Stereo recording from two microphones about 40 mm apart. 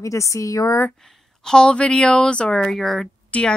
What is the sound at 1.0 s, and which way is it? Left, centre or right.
Speech, centre.